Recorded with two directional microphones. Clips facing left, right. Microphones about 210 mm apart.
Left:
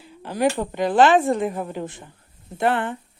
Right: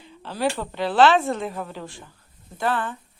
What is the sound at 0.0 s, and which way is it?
Speech, 15° left (ahead or behind).